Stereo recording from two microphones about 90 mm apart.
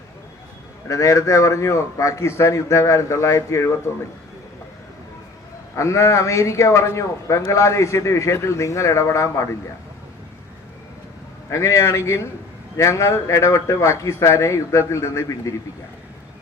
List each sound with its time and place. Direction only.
0.9 s a man's voice: 35° left (ahead or behind)
5.7 s a man's voice: 35° left (ahead or behind)
11.4 s a man's voice: 35° left (ahead or behind)